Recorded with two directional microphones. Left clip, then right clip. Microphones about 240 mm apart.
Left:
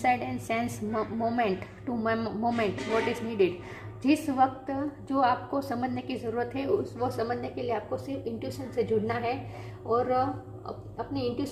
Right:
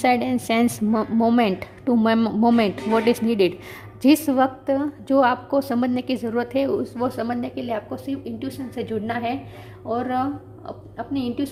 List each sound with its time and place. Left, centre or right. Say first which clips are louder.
0.0 s a woman's voice: right 7 dB; right